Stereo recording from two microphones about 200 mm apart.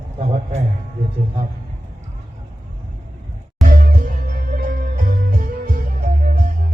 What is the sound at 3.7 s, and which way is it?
Music, 45° right (ahead or behind).